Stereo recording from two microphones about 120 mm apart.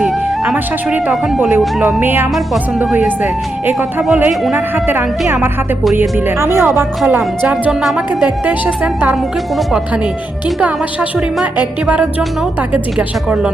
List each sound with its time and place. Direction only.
0.5 s a woman's voice: 15° right (ahead or behind)
4.3 s speech: centre (ahead or behind)
4.7 s a woman's voice: 15° right (ahead or behind)
7.4 s a woman's voice: 10° right (ahead or behind)
11.5 s a woman's voice: 10° right (ahead or behind)